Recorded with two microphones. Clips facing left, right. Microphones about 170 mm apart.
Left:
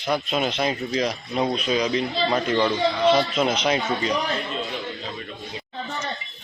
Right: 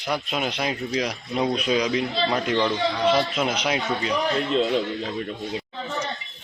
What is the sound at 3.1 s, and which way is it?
Speech, 10° right (ahead or behind).